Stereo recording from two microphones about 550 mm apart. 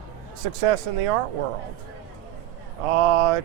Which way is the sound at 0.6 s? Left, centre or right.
Right.